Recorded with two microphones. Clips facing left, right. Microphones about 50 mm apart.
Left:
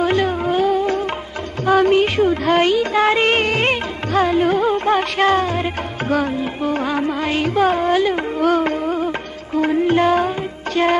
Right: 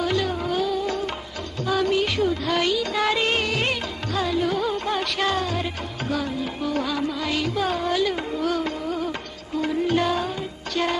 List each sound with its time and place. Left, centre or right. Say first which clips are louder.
0.0 s music: left 6 dB; left
6.7 s music: left 5 dB; left